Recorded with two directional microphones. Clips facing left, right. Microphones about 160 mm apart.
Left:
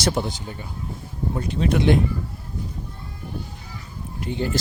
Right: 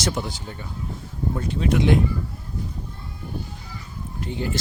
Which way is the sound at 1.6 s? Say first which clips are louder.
Left 1 dB; 35° left (ahead or behind).